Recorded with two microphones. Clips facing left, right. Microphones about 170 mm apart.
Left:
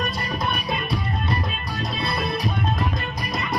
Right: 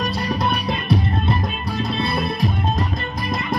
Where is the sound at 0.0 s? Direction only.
65° right (ahead or behind).